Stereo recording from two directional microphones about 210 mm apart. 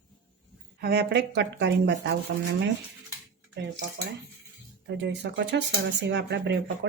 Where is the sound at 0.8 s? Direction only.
50° right (ahead or behind).